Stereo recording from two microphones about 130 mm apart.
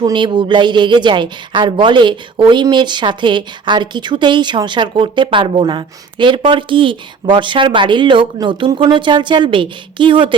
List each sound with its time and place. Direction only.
0.0 s a woman's voice: 35° right (ahead or behind)